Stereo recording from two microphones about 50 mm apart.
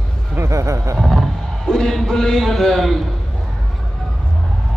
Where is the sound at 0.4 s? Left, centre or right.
Right.